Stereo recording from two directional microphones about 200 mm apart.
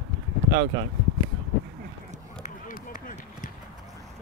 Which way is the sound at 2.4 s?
40° left (ahead or behind).